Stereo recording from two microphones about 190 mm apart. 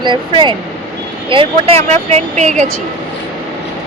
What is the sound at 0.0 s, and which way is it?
Speech, 25° right (ahead or behind).